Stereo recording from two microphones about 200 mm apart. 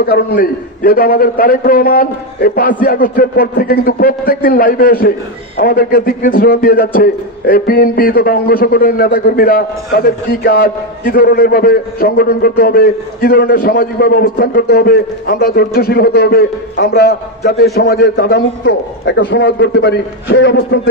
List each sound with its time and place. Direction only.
0.0 s a man's voice: 50° left (ahead or behind)